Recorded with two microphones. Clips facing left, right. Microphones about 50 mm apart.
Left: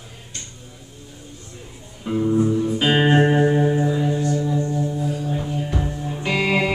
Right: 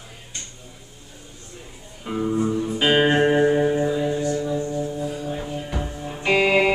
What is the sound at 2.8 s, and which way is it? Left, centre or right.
Music, centre.